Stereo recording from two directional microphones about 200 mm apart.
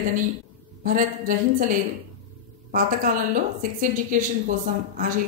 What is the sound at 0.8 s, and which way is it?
Speech, 45° right (ahead or behind).